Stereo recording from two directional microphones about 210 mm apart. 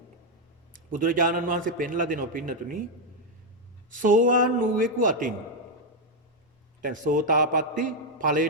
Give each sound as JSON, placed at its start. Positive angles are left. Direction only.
{"t": 0.9, "sound": "a man's voice", "side_deg": -40}
{"t": 3.9, "sound": "a man's voice", "side_deg": -40}
{"t": 6.8, "sound": "a man's voice", "side_deg": -40}